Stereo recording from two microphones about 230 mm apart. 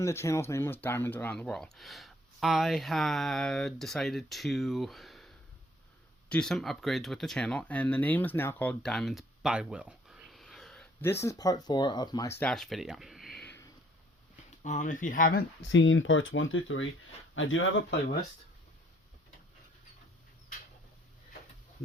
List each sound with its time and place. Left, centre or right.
0.0 s speech: centre
12.4 s speech: centre
14.6 s speech: left